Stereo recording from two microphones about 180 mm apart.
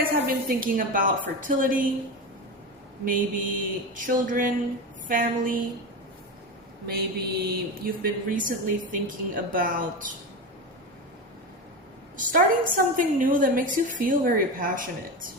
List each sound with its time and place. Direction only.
0.0 s a woman's voice: 55° right (ahead or behind)
3.0 s a woman's voice: 50° right (ahead or behind)
6.8 s mantra: 60° right (ahead or behind)
8.0 s a woman's voice: 50° right (ahead or behind)
12.1 s a woman's voice: 50° right (ahead or behind)